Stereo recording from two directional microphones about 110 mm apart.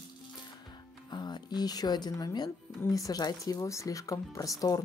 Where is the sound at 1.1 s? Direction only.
40° left (ahead or behind).